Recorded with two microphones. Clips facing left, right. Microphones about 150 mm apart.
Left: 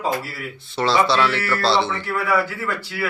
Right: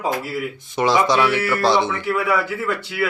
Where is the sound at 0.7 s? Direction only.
15° right (ahead or behind).